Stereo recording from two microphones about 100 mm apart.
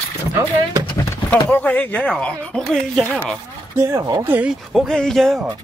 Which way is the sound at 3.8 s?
30° right (ahead or behind).